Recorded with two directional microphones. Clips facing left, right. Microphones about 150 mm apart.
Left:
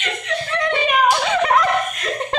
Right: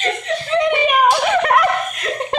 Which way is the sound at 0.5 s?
15° right (ahead or behind).